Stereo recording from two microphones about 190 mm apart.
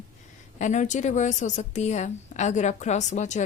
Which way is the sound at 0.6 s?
40° left (ahead or behind).